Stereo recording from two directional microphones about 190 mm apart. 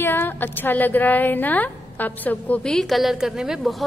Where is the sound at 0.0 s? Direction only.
10° left (ahead or behind).